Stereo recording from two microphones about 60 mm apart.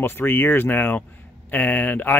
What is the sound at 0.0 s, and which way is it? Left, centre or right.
Speech, left.